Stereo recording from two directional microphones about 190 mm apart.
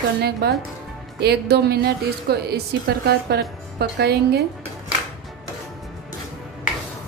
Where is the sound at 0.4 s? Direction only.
60° right (ahead or behind).